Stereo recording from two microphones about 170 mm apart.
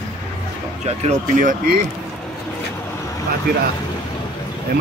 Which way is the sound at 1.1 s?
50° right (ahead or behind).